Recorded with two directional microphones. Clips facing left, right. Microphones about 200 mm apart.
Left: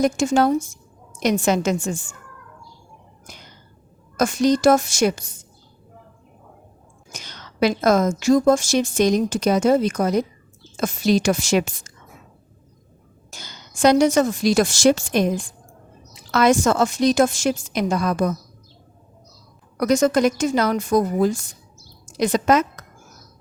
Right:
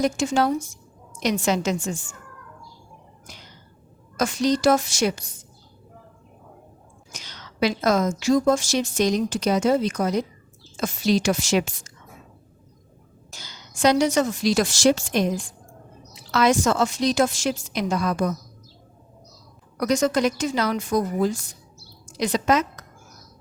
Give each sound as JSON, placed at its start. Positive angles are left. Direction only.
{"t": 0.0, "sound": "a woman's voice", "side_deg": 50}
{"t": 3.2, "sound": "whispering", "side_deg": 50}
{"t": 4.2, "sound": "a woman's voice", "side_deg": 50}
{"t": 7.1, "sound": "a woman's voice", "side_deg": 50}
{"t": 13.3, "sound": "a woman's voice", "side_deg": 50}
{"t": 19.8, "sound": "a woman's voice", "side_deg": 45}